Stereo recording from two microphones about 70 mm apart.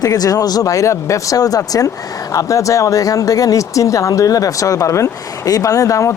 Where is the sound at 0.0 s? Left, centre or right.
Left.